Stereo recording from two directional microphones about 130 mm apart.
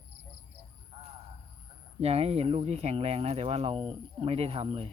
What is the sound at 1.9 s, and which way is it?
Speech, 50° right (ahead or behind).